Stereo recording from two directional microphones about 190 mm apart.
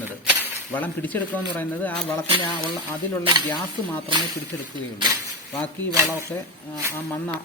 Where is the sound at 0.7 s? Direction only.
10° left (ahead or behind).